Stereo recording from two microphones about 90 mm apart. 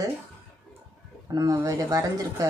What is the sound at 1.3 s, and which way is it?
Speech, 40° right (ahead or behind).